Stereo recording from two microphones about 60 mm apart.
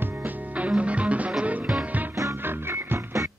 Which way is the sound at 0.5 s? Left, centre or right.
Right.